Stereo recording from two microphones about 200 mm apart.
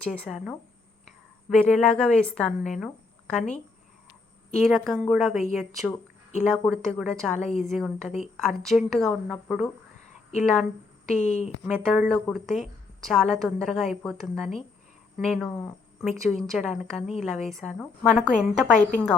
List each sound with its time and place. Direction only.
0.1 s a woman's voice: centre (ahead or behind)
4.6 s a woman's voice: centre (ahead or behind)
11.1 s speech: 35° left (ahead or behind)
11.6 s a woman's voice: centre (ahead or behind)